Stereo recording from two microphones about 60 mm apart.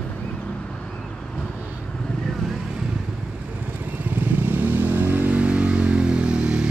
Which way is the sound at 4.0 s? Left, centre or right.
Right.